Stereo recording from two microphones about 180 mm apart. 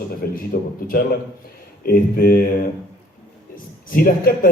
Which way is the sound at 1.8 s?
55° left (ahead or behind).